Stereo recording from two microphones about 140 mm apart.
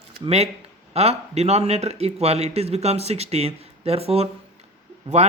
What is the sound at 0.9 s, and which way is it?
Speech, 50° right (ahead or behind).